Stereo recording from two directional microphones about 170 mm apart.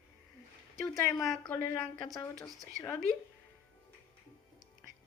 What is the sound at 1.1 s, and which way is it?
Speech, centre (ahead or behind).